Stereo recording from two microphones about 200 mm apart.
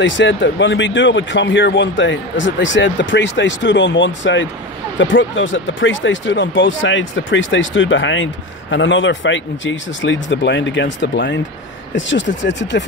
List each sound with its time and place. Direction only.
0.0 s speech: 65° left (ahead or behind)